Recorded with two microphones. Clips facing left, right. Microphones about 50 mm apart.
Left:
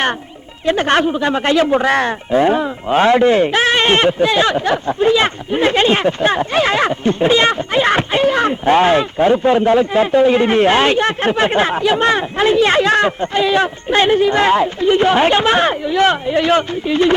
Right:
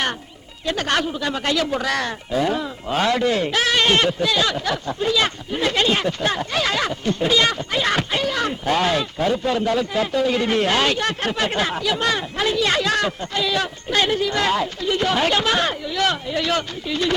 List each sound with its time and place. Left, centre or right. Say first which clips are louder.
0.6 s speech: left 8 dB; left